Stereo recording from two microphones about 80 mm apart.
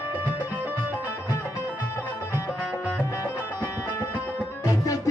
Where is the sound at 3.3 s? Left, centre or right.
Right.